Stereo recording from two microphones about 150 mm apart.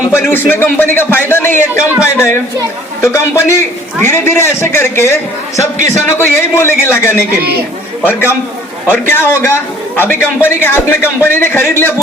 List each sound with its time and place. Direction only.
0.1 s a man's voice: 15° left (ahead or behind)
8.9 s a man's voice: 15° left (ahead or behind)